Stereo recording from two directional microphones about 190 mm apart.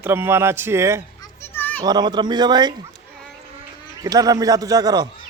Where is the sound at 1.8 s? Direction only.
20° right (ahead or behind).